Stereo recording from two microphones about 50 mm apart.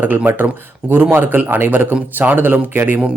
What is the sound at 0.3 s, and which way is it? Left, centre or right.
Speech, right.